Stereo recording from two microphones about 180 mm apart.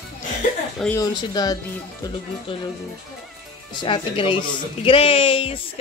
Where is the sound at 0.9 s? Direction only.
20° left (ahead or behind).